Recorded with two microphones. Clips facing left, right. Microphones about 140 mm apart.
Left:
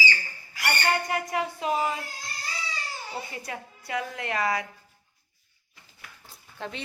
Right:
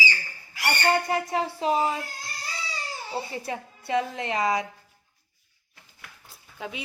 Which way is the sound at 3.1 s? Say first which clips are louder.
Right 6 dB; 30° right (ahead or behind).